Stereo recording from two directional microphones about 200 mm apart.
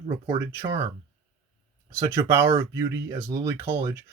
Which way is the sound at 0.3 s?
15° right (ahead or behind).